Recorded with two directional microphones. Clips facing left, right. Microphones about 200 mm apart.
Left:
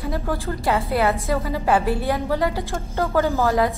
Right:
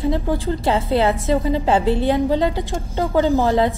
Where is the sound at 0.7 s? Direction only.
30° right (ahead or behind).